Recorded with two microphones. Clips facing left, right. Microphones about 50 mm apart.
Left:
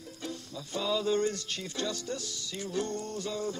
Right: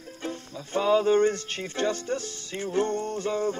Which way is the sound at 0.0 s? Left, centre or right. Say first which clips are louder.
Right 5 dB; right.